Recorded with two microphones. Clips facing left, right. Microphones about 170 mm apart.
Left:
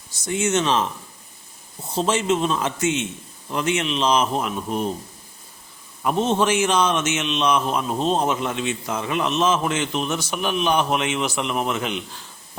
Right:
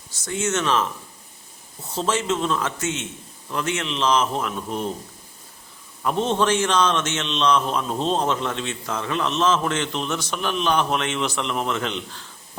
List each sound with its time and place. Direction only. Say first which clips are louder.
0.3 s a man's voice: left 2 dB; 15° left (ahead or behind)
1.9 s a man's voice: left 3 dB; 15° left (ahead or behind)
6.0 s a man's voice: left 1 dB; 10° left (ahead or behind)